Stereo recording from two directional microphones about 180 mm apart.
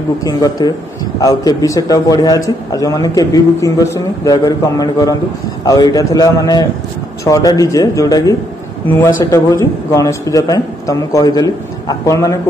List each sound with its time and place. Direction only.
0.2 s a man's voice: 20° left (ahead or behind)